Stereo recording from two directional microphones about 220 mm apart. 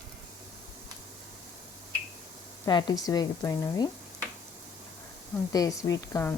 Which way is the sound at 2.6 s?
20° left (ahead or behind).